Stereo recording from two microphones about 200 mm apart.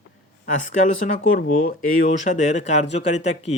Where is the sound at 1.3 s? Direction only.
45° left (ahead or behind).